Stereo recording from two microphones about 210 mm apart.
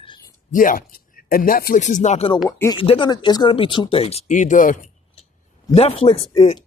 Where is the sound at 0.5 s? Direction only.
40° left (ahead or behind).